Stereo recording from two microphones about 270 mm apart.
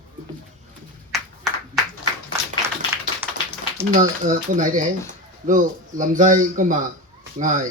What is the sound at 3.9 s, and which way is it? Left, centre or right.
A man's voice, right.